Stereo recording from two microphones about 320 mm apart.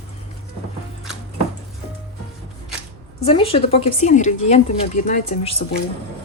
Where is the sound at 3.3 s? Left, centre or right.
Centre.